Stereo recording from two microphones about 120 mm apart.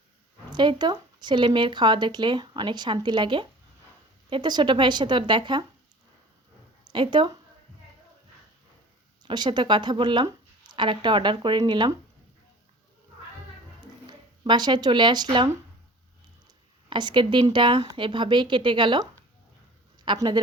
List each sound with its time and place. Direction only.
0.5 s speech: 40° right (ahead or behind)
6.9 s speech: 40° right (ahead or behind)
9.2 s speech: 40° right (ahead or behind)
14.1 s speech: 40° right (ahead or behind)
16.9 s speech: 40° right (ahead or behind)
20.1 s speech: 40° right (ahead or behind)